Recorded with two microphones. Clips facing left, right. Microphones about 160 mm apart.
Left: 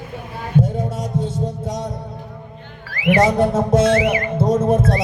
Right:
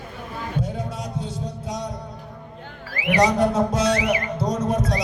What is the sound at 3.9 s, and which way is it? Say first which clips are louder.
Music: left 5 dB; 25° left (ahead or behind).